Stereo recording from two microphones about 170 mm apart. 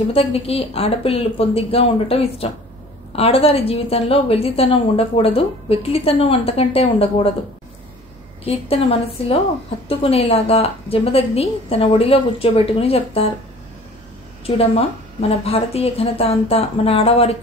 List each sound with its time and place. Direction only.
0.1 s a woman's voice: 35° left (ahead or behind)
8.5 s a woman's voice: 35° left (ahead or behind)
14.4 s a woman's voice: 35° left (ahead or behind)